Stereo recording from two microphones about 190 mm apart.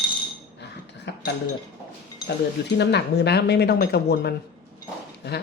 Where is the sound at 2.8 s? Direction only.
60° left (ahead or behind).